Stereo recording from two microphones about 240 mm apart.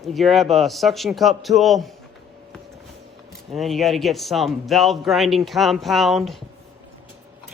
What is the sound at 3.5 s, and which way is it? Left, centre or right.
A man's voice, centre.